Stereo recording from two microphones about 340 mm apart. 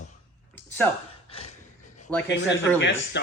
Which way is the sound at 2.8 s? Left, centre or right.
Left.